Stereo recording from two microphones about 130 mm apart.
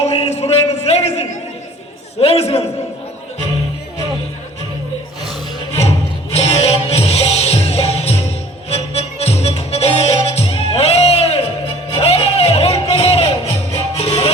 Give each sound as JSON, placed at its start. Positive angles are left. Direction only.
{"t": 0.0, "sound": "a sound", "side_deg": 55}
{"t": 2.2, "sound": "a man's voice", "side_deg": 55}
{"t": 6.3, "sound": "music", "side_deg": 55}